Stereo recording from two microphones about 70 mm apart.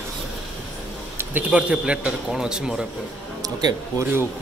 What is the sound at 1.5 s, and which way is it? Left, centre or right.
Speech, centre.